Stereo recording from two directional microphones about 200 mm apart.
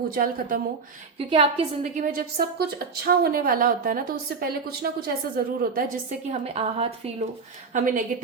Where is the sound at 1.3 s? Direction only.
30° right (ahead or behind); by 5.1 s 50° right (ahead or behind).